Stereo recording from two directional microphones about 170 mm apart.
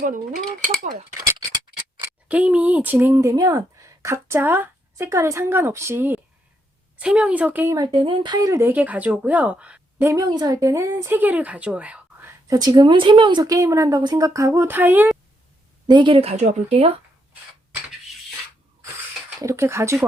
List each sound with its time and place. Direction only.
0.0 s a sound: 50° right (ahead or behind)
2.0 s speech: 10° right (ahead or behind)
7.9 s speech: 30° right (ahead or behind); by 10.1 s 5° right (ahead or behind)
10.1 s speech: 20° right (ahead or behind)
15.9 s speech: 30° right (ahead or behind)
19.4 s speech: 15° right (ahead or behind)